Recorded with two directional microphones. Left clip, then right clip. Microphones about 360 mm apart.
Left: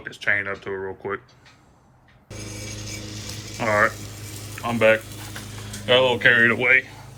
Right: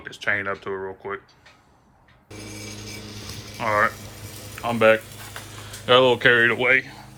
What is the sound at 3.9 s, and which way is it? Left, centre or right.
Boiling, left.